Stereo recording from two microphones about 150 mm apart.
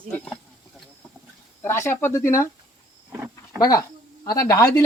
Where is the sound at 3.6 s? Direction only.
25° left (ahead or behind).